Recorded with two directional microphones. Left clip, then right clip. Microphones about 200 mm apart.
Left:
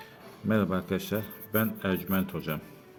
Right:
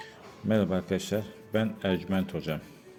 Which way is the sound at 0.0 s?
5° right (ahead or behind).